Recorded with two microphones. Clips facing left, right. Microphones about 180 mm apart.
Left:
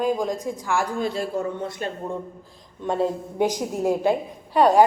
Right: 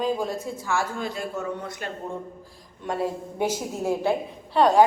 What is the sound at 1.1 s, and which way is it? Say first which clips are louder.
A woman's voice: left 4 dB; 25° left (ahead or behind).